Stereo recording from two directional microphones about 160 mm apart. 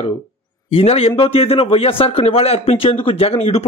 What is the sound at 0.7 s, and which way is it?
A man's voice, 40° left (ahead or behind).